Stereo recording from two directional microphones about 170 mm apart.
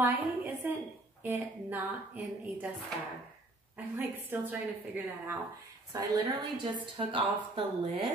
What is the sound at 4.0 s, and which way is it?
Speech, 10° right (ahead or behind).